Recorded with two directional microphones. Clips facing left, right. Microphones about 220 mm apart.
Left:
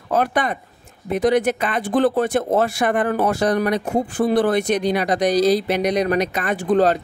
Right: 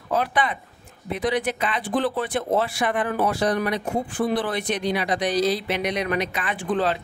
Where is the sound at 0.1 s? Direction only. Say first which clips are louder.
Left 4 dB; 45° left (ahead or behind).